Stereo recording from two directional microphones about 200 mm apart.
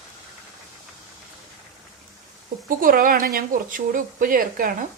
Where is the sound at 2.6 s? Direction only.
45° right (ahead or behind).